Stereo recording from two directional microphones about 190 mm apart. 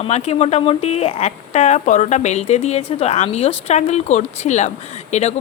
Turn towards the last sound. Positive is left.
turn(degrees=35)  # may be behind; listen again after turning